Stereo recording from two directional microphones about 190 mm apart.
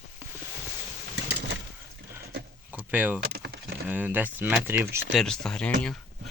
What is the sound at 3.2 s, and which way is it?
Power windows, 55° right (ahead or behind).